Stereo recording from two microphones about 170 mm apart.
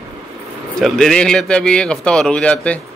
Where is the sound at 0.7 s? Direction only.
Centre (ahead or behind).